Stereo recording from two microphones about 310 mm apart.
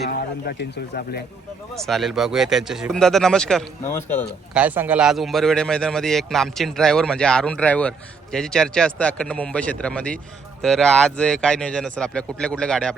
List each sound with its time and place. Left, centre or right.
0.1 s speech: left
1.7 s speech: centre